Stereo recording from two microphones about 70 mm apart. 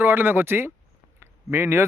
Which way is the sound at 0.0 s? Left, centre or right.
Right.